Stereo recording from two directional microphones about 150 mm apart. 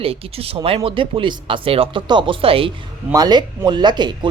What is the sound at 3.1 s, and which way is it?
Speech, 25° right (ahead or behind).